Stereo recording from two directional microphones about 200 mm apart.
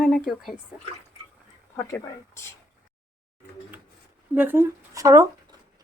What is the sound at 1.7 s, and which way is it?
Speech, 15° left (ahead or behind).